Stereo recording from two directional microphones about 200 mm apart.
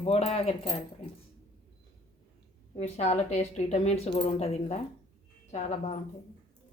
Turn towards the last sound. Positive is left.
turn(degrees=35)  # may be behind; listen again after turning